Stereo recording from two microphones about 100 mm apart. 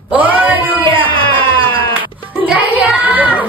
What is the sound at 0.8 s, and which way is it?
Speech, 60° right (ahead or behind).